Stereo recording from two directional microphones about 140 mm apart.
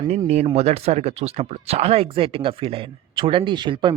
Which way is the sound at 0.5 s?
50° right (ahead or behind).